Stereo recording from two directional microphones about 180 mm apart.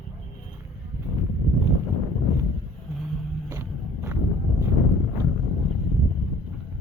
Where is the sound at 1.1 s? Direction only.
15° right (ahead or behind).